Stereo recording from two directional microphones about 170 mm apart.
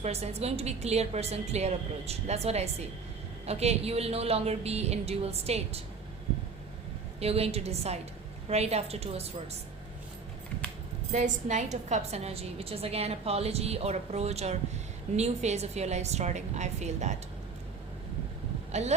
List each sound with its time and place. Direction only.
0.0 s a woman's voice: 40° right (ahead or behind)
7.2 s a woman's voice: 35° right (ahead or behind)
11.1 s a woman's voice: 45° right (ahead or behind)
18.7 s speech: 40° right (ahead or behind)